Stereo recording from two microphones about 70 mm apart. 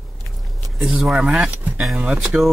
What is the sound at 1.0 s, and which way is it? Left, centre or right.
Speech, centre.